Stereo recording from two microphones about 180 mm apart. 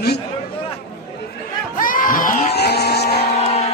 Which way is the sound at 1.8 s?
50° left (ahead or behind).